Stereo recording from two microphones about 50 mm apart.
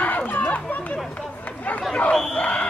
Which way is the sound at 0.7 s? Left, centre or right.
Left.